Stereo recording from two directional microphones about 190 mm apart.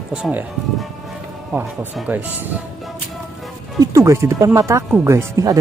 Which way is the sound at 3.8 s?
15° right (ahead or behind).